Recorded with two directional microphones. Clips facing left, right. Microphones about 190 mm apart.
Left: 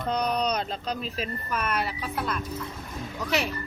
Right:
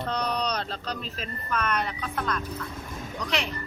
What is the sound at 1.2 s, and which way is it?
A woman's voice, 10° left (ahead or behind).